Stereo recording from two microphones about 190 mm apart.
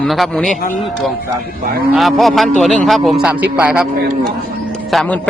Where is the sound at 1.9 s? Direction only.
Centre (ahead or behind).